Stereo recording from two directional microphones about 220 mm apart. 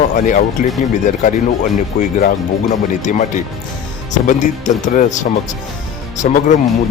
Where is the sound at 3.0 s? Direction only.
35° left (ahead or behind).